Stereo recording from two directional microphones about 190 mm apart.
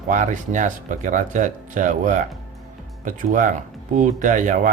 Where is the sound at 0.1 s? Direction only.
40° right (ahead or behind).